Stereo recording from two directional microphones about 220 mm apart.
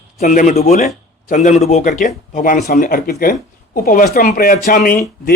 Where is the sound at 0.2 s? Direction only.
35° left (ahead or behind).